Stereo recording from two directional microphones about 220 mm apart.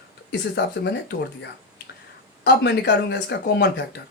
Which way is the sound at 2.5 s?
50° left (ahead or behind).